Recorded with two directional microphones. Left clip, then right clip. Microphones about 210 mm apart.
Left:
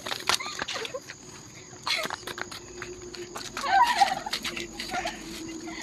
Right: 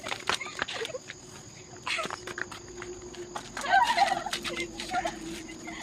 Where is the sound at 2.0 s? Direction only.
35° left (ahead or behind).